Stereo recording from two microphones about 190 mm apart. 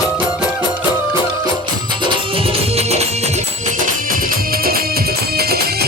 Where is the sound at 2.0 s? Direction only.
30° right (ahead or behind).